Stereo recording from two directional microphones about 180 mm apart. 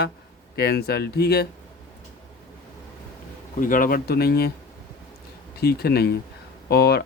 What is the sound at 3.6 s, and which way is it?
Speech, 50° left (ahead or behind).